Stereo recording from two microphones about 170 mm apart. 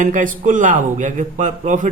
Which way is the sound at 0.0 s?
50° right (ahead or behind).